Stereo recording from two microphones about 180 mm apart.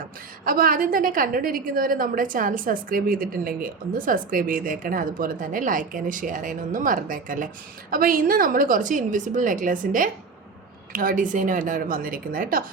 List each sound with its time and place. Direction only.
0.4 s a woman's voice: 50° right (ahead or behind)